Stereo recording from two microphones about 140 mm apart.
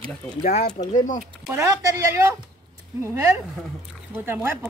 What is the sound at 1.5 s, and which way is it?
A woman's voice, 25° right (ahead or behind).